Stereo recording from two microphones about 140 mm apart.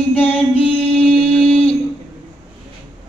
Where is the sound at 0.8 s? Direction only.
10° left (ahead or behind).